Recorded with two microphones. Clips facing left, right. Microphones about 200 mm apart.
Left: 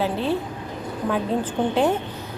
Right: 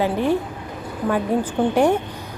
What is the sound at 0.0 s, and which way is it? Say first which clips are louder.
A woman's voice: right 3 dB; 15° right (ahead or behind).